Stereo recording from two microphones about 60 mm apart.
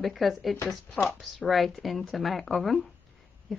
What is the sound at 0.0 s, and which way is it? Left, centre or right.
Speech, centre.